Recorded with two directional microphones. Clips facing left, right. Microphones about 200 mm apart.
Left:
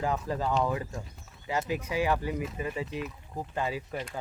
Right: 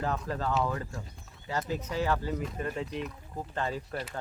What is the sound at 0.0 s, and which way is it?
Speech, 15° left (ahead or behind).